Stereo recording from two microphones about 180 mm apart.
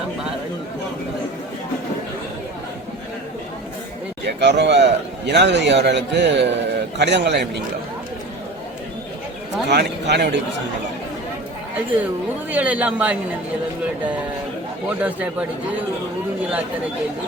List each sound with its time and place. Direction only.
4.3 s a man's voice: 70° right (ahead or behind)
9.6 s a man's voice: 70° right (ahead or behind)
12.5 s a man's voice: 10° right (ahead or behind)
14.8 s a man's voice: 10° right (ahead or behind)